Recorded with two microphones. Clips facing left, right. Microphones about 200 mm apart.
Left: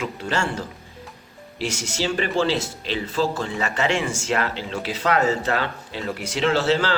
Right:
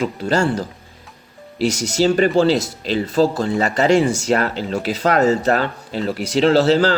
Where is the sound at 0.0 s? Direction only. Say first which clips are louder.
Right 7 dB; 40° right (ahead or behind).